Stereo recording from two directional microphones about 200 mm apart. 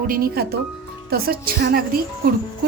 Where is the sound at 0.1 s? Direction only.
50° right (ahead or behind).